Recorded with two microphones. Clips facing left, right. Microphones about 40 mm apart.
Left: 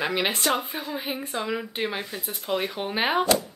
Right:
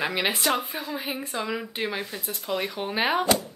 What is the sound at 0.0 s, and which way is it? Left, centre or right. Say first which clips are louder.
Speech: even; centre.